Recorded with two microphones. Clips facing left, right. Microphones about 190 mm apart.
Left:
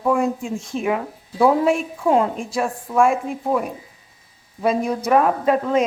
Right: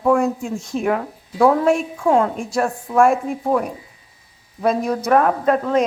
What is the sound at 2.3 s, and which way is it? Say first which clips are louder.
A woman's voice: right 2 dB; centre (ahead or behind).